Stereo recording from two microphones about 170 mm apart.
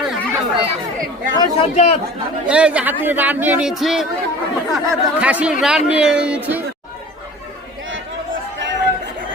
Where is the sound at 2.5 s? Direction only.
5° right (ahead or behind).